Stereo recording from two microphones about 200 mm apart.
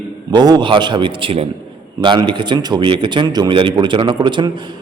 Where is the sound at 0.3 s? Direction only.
20° right (ahead or behind).